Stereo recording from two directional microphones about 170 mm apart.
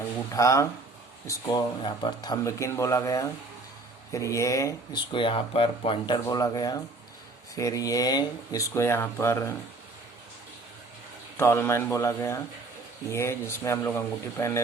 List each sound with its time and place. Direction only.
0.3 s speech: 20° left (ahead or behind)
5.1 s speech: 30° left (ahead or behind); by 9.6 s 15° left (ahead or behind)
11.3 s speech: 15° left (ahead or behind)